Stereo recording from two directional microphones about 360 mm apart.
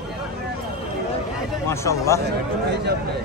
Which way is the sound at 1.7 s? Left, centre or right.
Centre.